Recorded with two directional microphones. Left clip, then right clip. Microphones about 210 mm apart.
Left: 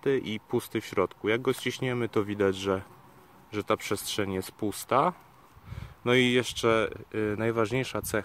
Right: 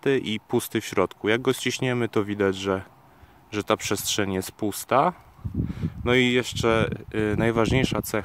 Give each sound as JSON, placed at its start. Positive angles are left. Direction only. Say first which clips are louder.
{"t": 0.0, "sound": "speech", "louder": "right 4 dB", "side_deg": -25}